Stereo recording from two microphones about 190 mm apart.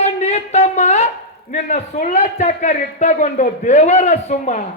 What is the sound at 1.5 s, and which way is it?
A man's voice, 45° left (ahead or behind).